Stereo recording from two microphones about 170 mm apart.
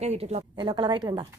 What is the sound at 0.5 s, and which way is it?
Speech, 25° right (ahead or behind).